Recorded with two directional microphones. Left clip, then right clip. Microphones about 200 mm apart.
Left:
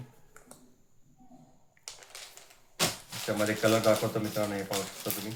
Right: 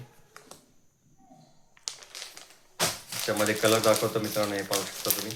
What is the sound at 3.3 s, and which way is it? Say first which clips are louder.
Speech: right 2 dB; centre (ahead or behind).